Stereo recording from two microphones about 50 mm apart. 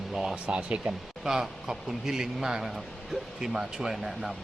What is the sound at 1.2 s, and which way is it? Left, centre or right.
Speech, centre.